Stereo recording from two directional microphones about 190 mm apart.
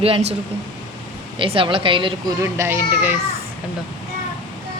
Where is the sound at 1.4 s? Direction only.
25° right (ahead or behind).